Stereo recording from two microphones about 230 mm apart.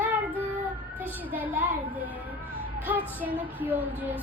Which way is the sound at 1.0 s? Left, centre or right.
Centre.